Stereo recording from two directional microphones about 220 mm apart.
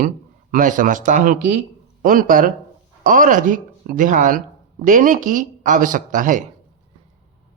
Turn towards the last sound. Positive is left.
turn(degrees=-35)  # may be behind; listen again after turning